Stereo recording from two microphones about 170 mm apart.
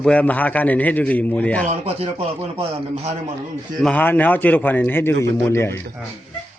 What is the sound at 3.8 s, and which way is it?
A man's voice, 10° left (ahead or behind).